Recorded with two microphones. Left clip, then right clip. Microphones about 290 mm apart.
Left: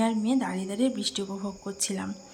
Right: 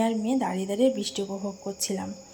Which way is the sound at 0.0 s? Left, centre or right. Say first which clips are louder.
Right 1 dB; centre.